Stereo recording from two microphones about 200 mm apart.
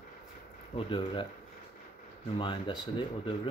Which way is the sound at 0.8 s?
25° left (ahead or behind).